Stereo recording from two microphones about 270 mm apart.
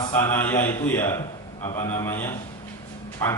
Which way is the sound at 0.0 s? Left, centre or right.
Centre.